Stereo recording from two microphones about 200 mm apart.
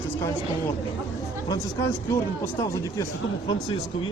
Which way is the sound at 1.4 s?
15° left (ahead or behind).